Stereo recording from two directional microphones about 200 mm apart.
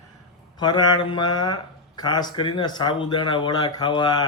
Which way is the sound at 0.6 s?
20° left (ahead or behind).